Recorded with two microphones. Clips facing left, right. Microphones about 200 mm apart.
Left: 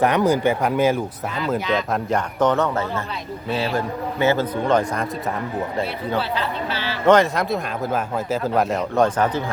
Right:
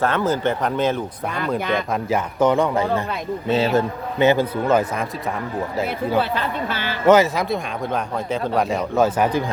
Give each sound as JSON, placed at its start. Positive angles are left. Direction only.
{"t": 0.0, "sound": "speech", "side_deg": 15}
{"t": 1.5, "sound": "a woman's voice", "side_deg": -55}
{"t": 1.9, "sound": "a man's voice", "side_deg": -5}
{"t": 4.7, "sound": "speech", "side_deg": -5}
{"t": 6.1, "sound": "a woman's voice", "side_deg": -50}
{"t": 7.1, "sound": "speech", "side_deg": -5}